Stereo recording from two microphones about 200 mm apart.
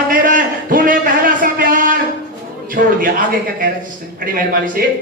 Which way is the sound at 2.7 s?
45° right (ahead or behind).